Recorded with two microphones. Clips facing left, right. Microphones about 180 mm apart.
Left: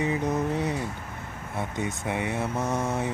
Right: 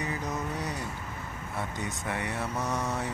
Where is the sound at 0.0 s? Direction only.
25° left (ahead or behind).